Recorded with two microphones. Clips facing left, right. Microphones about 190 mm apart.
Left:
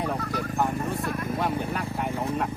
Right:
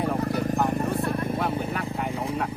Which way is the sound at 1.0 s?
30° right (ahead or behind).